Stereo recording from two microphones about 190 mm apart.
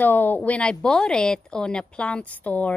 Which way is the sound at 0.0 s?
10° left (ahead or behind).